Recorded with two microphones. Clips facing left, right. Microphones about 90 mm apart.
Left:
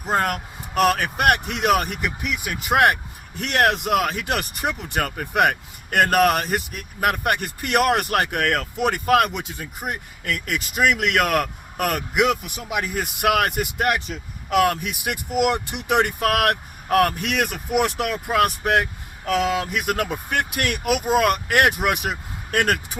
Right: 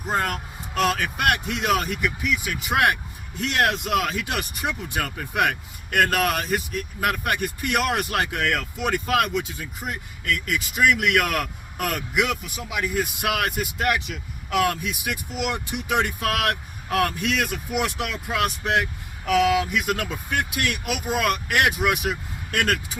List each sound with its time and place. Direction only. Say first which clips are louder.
0.1 s speech: left 3 dB; 50° left (ahead or behind)
19.2 s speech: right 2 dB; 35° left (ahead or behind); by 22.1 s 55° left (ahead or behind)